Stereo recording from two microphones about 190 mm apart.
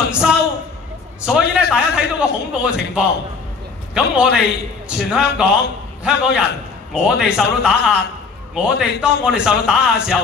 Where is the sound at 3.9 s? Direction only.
5° right (ahead or behind).